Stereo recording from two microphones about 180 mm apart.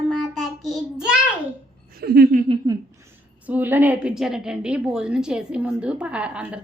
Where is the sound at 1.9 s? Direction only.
55° right (ahead or behind).